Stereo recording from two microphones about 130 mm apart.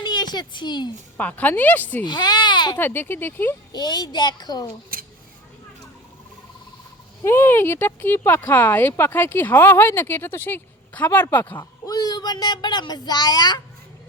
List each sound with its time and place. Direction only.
0.0 s a woman's voice: 35° left (ahead or behind)
1.1 s speech: 15° left (ahead or behind)
2.0 s a child's voice: 35° left (ahead or behind)
2.7 s speech: 15° left (ahead or behind)
3.7 s a child's voice: 30° left (ahead or behind)
4.9 s a sound: 90° right
7.3 s speech: 15° left (ahead or behind)
11.9 s speech: 30° left (ahead or behind)